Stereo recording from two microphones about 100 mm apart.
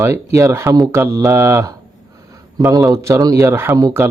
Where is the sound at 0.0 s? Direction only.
30° right (ahead or behind).